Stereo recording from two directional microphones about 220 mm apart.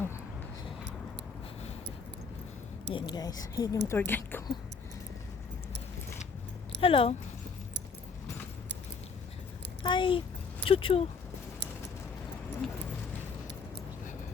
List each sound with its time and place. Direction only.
2.9 s speech: 20° left (ahead or behind)
6.8 s speech: 25° left (ahead or behind)
9.8 s speech: 20° left (ahead or behind)
12.6 s keys jangling: centre (ahead or behind)